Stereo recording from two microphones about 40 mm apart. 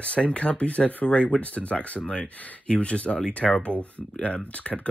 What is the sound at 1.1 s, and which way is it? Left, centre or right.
Speech, left.